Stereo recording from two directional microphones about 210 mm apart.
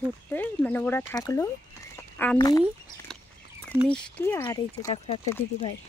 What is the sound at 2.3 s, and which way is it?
Speech, 15° left (ahead or behind).